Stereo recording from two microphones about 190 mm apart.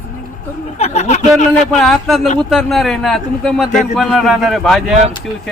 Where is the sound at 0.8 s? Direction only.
35° left (ahead or behind).